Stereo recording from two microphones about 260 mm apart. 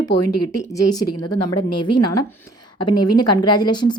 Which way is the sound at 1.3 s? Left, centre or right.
Centre.